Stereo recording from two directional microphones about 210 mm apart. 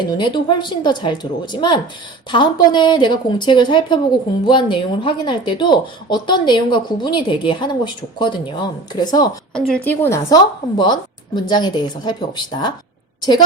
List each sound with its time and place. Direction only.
0.2 s speech: 20° left (ahead or behind)
9.6 s speech: 5° left (ahead or behind)